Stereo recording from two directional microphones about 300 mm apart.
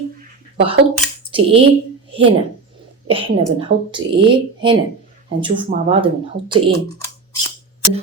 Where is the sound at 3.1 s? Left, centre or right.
Centre.